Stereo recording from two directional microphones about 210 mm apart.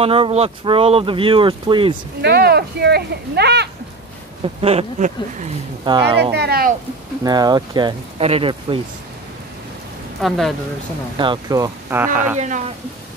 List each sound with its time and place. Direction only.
0.0 s speech: 25° right (ahead or behind)
2.2 s speech: 50° right (ahead or behind)
4.6 s speech: 30° right (ahead or behind)
6.3 s speech: 50° right (ahead or behind)
7.2 s speech: 20° right (ahead or behind)
10.2 s speech: centre (ahead or behind)
11.1 s speech: 20° right (ahead or behind)
12.4 s speech: 35° right (ahead or behind)